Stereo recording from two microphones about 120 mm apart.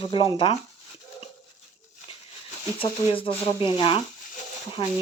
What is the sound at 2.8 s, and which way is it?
Speech, 50° left (ahead or behind).